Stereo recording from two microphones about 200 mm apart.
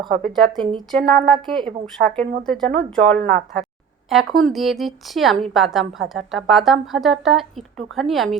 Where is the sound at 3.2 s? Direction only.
45° right (ahead or behind).